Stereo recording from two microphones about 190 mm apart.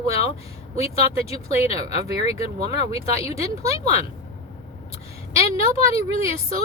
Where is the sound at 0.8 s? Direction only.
30° left (ahead or behind).